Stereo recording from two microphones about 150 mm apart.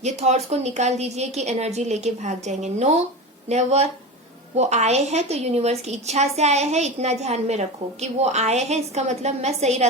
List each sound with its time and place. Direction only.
0.0 s a woman's voice: 50° right (ahead or behind)